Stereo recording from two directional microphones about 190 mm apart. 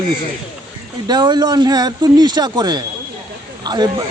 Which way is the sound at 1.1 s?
20° right (ahead or behind).